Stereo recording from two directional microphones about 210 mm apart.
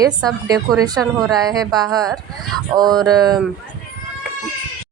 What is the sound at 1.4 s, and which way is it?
Speech, 15° right (ahead or behind).